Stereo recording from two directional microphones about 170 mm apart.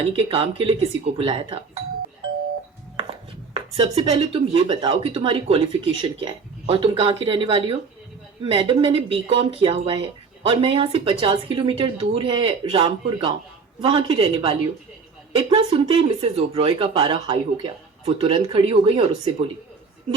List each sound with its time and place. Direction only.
0.1 s speech: 35° right (ahead or behind)
3.0 s speech: 30° right (ahead or behind)